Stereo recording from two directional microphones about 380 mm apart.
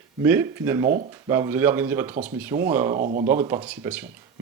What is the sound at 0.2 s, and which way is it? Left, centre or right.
Speech, centre.